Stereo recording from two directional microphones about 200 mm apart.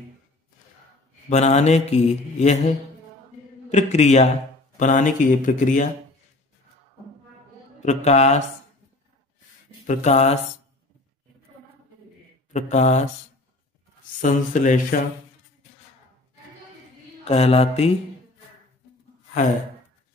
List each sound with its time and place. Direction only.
1.3 s mantra: 35° left (ahead or behind)
3.7 s mantra: 35° left (ahead or behind)
7.8 s mantra: 35° left (ahead or behind)
9.8 s mantra: 35° left (ahead or behind)
12.5 s mantra: 35° left (ahead or behind)
14.2 s mantra: 40° left (ahead or behind)
17.2 s mantra: 30° left (ahead or behind)